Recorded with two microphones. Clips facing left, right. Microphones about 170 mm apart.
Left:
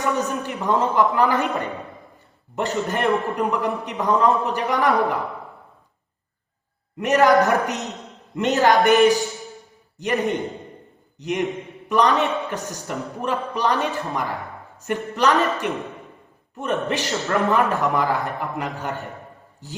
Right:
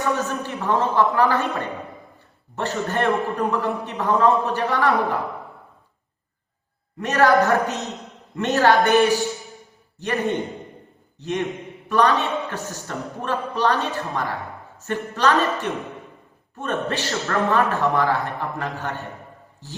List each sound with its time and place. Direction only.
0.0 s a man's voice: 15° left (ahead or behind)
7.0 s a man's voice: 15° left (ahead or behind)